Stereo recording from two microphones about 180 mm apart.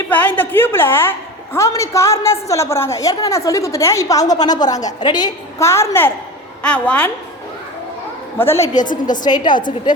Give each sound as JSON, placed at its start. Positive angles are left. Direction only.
{"t": 0.1, "sound": "a woman's voice", "side_deg": 10}
{"t": 8.7, "sound": "a woman's voice", "side_deg": 45}
{"t": 9.2, "sound": "a woman's voice", "side_deg": 25}